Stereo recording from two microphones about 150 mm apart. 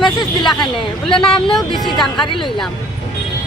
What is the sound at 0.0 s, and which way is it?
Speech, 30° left (ahead or behind).